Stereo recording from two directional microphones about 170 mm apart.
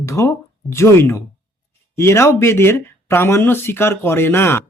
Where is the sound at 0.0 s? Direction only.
15° left (ahead or behind).